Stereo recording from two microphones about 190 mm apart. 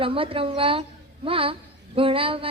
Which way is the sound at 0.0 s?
30° right (ahead or behind).